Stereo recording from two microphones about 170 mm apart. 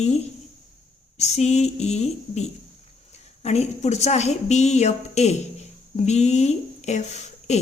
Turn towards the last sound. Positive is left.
turn(degrees=40)  # may be behind; listen again after turning